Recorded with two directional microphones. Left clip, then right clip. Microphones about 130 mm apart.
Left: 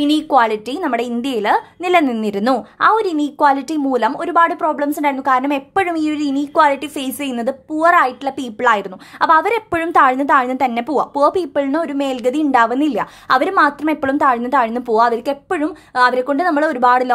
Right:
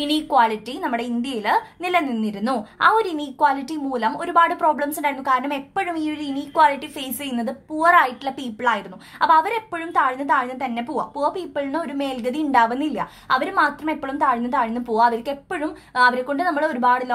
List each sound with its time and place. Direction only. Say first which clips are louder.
0.0 s speech: left 4 dB; 40° left (ahead or behind); by 2.5 s 60° left (ahead or behind)
2.5 s speech: left 3 dB; 35° left (ahead or behind); by 4.1 s 50° left (ahead or behind)
4.1 s speech: left 3 dB; 35° left (ahead or behind)